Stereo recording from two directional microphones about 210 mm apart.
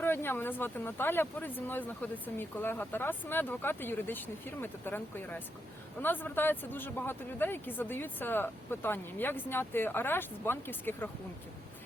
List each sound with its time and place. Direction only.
0.0 s speech: 10° left (ahead or behind)